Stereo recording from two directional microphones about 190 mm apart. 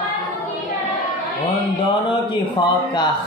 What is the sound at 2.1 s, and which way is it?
Speech, 25° left (ahead or behind).